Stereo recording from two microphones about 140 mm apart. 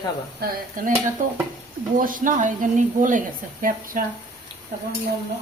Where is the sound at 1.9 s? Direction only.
75° right (ahead or behind).